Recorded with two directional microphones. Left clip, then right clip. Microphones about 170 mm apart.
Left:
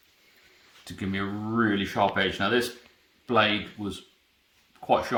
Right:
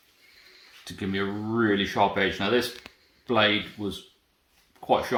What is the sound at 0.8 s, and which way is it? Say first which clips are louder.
Speech: right 2 dB; 35° left (ahead or behind).